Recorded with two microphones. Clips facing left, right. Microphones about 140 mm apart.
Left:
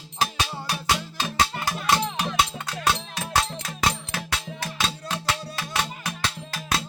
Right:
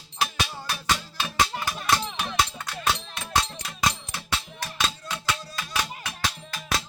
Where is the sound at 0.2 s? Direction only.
30° left (ahead or behind).